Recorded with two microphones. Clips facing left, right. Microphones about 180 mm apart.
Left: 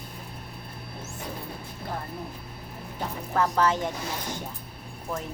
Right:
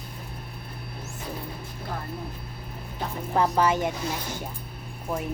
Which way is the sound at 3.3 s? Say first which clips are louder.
Right 2 dB; 15° right (ahead or behind).